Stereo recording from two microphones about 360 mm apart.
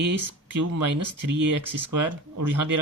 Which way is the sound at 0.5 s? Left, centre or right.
Right.